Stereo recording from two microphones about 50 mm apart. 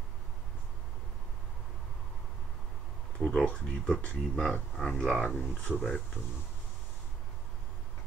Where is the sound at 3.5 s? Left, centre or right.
Centre.